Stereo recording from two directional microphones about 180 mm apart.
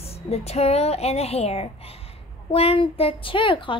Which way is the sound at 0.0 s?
35° left (ahead or behind).